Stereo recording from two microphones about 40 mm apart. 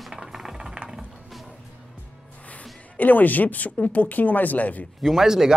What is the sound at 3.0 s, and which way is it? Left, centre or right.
Speech, left.